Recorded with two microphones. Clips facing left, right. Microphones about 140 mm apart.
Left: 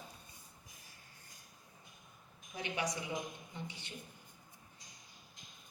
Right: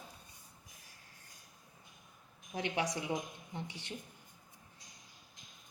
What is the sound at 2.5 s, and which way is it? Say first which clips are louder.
Speech: right 5 dB; 85° right.